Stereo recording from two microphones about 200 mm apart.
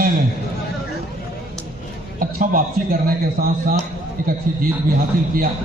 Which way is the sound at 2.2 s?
45° right (ahead or behind).